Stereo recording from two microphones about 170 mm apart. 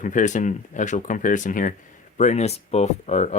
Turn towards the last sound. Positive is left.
turn(degrees=45)  # may be behind; listen again after turning